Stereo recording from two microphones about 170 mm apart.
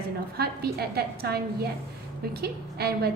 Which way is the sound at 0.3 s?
65° right (ahead or behind).